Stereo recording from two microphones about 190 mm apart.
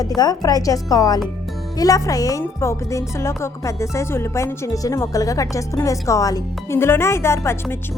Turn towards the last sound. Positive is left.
turn(degrees=15)  # may be behind; listen again after turning